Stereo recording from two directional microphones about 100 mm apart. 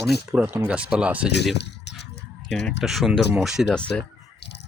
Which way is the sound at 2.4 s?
5° left (ahead or behind).